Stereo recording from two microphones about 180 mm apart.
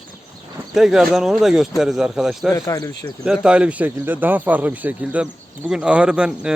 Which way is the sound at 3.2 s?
5° right (ahead or behind).